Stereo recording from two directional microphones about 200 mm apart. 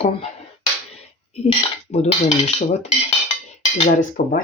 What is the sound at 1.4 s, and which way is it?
Speech, 35° left (ahead or behind).